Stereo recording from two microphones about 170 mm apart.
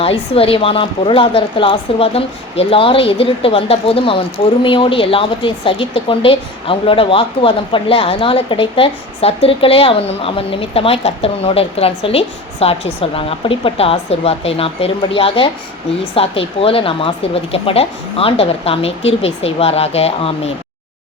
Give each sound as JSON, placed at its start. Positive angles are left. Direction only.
{"t": 0.0, "sound": "a woman's voice", "side_deg": 35}